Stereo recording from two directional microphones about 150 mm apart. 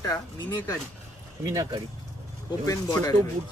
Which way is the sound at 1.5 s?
25° right (ahead or behind).